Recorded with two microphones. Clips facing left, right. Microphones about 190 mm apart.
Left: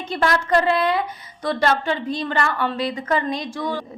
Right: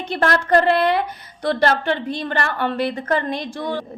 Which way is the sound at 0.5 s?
65° right (ahead or behind).